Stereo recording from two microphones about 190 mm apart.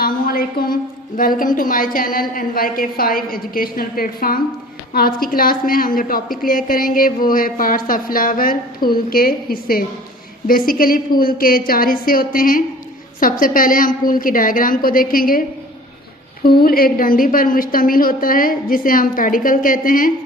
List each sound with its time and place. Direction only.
0.0 s a woman's voice: 50° left (ahead or behind)